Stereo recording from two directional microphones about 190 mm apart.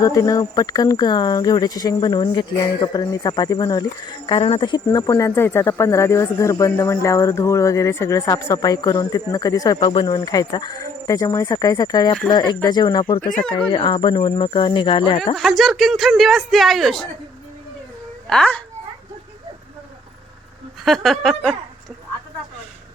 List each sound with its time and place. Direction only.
0.0 s speech: 15° left (ahead or behind)
4.9 s speech: 15° left (ahead or behind)
15.4 s speech: centre (ahead or behind)
18.3 s speech: 5° left (ahead or behind)
20.8 s speech: centre (ahead or behind)